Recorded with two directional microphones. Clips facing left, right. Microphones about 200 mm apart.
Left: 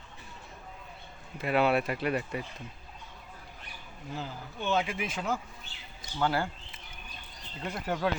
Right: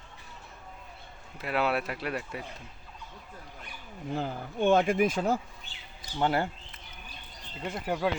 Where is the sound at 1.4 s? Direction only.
Centre (ahead or behind).